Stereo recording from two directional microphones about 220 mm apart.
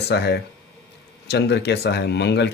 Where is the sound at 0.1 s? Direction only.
50° left (ahead or behind).